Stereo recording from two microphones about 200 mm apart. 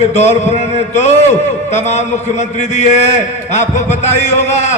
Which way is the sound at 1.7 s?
35° left (ahead or behind).